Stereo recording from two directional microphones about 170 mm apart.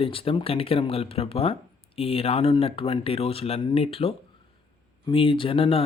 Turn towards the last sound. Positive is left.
turn(degrees=30)  # may be behind; listen again after turning